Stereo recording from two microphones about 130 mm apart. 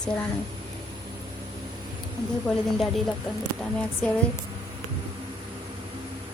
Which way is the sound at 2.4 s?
Centre (ahead or behind).